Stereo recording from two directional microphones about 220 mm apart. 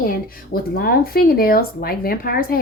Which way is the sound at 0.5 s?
45° left (ahead or behind).